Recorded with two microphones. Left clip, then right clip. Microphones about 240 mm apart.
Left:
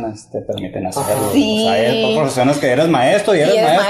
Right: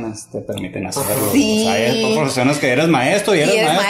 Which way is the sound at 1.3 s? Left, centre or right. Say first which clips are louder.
Right 2 dB; right.